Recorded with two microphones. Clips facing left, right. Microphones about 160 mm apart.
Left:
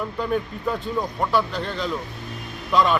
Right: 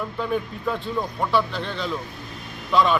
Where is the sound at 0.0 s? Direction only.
Centre (ahead or behind).